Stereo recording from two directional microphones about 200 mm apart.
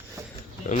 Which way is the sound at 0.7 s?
40° left (ahead or behind).